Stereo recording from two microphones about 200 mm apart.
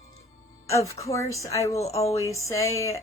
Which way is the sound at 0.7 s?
15° left (ahead or behind).